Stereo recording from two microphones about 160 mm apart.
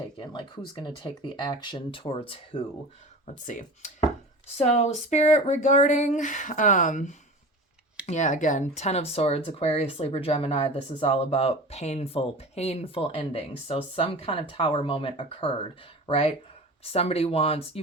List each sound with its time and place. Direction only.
0.2 s speech: 30° left (ahead or behind)
3.4 s speech: 50° left (ahead or behind)
4.5 s speech: 40° left (ahead or behind)